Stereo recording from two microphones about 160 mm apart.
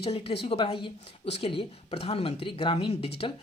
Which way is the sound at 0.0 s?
35° left (ahead or behind).